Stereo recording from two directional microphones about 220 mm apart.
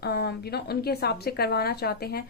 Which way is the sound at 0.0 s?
45° left (ahead or behind).